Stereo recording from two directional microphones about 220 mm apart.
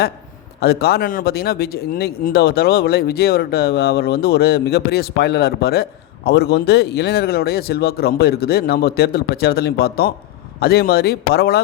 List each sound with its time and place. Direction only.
0.6 s speech: 45° left (ahead or behind)